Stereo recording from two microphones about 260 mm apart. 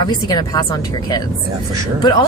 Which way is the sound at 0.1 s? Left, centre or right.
Centre.